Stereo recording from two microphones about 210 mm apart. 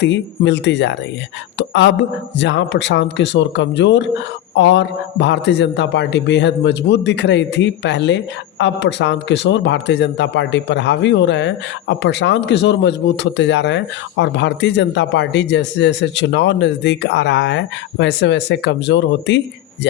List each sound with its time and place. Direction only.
0.0 s a man's voice: 55° left (ahead or behind)